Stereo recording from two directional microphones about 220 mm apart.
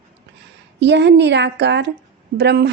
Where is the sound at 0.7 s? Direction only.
50° right (ahead or behind).